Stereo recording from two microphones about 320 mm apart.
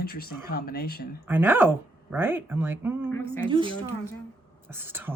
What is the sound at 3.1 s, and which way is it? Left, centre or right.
Speech, centre.